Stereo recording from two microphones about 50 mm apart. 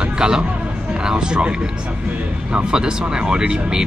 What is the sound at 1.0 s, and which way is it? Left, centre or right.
Speech, centre.